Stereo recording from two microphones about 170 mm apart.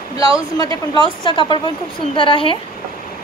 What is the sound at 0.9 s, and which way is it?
Speech, 30° left (ahead or behind).